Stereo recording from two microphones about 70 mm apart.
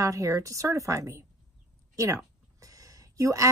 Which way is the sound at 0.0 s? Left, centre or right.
Right.